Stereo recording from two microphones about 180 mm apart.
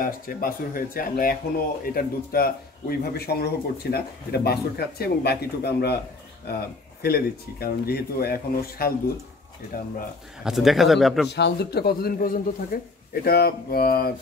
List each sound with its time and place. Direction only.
0.0 s speech: 50° left (ahead or behind)
10.4 s speech: centre (ahead or behind)
11.2 s speech: 70° left (ahead or behind)